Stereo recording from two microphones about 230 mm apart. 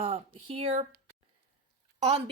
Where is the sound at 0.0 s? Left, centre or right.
Right.